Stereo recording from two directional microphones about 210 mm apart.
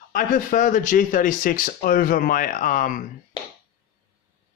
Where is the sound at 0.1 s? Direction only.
40° left (ahead or behind).